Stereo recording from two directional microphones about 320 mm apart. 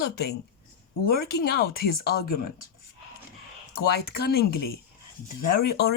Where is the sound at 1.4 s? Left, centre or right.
Left.